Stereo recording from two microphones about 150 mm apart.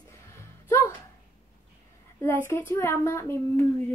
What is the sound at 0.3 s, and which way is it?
Music, 20° left (ahead or behind).